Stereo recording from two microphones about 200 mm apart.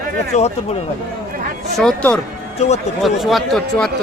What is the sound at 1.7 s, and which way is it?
Speech, 5° left (ahead or behind).